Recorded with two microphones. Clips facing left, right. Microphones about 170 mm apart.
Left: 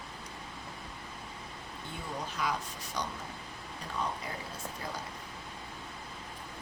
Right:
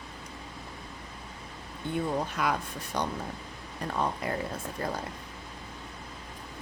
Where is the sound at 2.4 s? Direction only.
60° right (ahead or behind).